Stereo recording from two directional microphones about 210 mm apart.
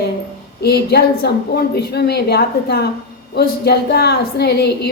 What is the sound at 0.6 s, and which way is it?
A woman's voice, 50° left (ahead or behind).